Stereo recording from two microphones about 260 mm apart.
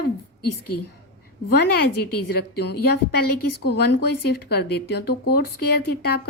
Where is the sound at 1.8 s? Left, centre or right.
Left.